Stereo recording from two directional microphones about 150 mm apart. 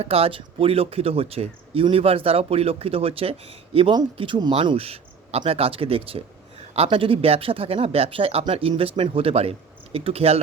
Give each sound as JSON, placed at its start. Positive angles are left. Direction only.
{"t": 0.0, "sound": "speech", "side_deg": -40}